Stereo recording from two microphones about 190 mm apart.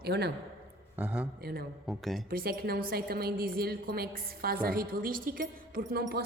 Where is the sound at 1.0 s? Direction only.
5° right (ahead or behind).